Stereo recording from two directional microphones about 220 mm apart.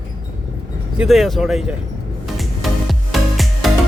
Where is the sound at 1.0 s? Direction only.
Centre (ahead or behind).